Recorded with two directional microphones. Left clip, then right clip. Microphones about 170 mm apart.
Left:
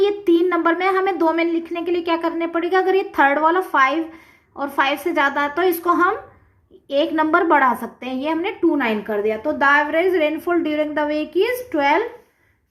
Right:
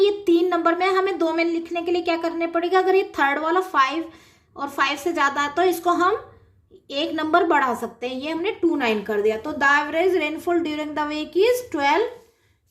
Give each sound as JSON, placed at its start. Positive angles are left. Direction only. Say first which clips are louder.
{"t": 0.0, "sound": "a woman's voice", "louder": "left 2 dB", "side_deg": 35}